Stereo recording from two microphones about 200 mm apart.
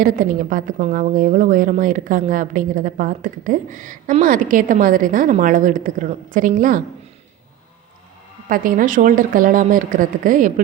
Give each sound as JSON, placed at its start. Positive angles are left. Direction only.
{"t": 0.0, "sound": "a woman's voice", "side_deg": -40}
{"t": 8.4, "sound": "speech", "side_deg": -45}